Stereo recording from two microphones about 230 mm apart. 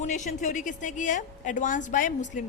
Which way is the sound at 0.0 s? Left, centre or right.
Left.